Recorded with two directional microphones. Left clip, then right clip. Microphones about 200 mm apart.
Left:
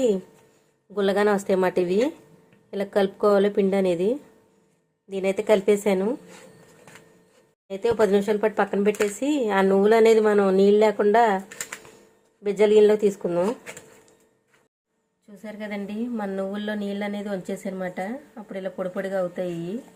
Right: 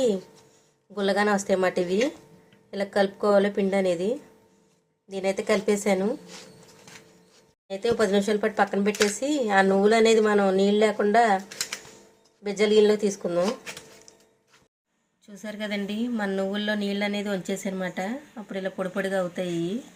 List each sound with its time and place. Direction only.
0.9 s speech: 50° left (ahead or behind)
7.7 s speech: 50° left (ahead or behind)
15.4 s speech: 5° right (ahead or behind)